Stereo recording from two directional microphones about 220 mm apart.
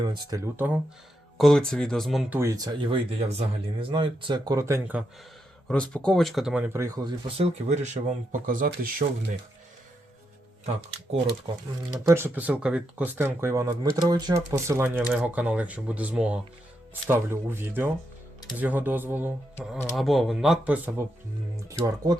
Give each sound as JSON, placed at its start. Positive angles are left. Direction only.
{"t": 0.0, "sound": "speech", "side_deg": -20}
{"t": 1.4, "sound": "speech", "side_deg": 0}
{"t": 2.4, "sound": "speech", "side_deg": -15}
{"t": 5.6, "sound": "speech", "side_deg": 5}
{"t": 11.1, "sound": "speech", "side_deg": -30}
{"t": 11.9, "sound": "speech", "side_deg": -15}